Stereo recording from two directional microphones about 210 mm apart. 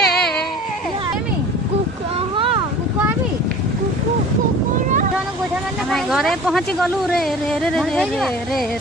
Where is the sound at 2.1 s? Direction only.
25° right (ahead or behind).